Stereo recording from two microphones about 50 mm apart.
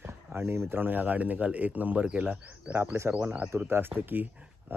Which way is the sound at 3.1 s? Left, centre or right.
Right.